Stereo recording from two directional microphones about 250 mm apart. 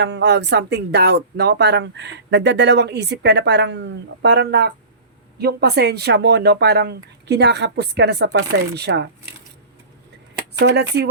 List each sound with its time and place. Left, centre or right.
0.0 s speech: right
10.6 s speech: right